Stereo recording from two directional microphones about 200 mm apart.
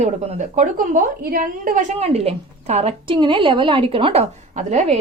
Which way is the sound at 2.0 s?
30° right (ahead or behind).